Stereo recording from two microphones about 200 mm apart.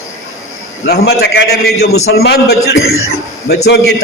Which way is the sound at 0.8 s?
55° left (ahead or behind).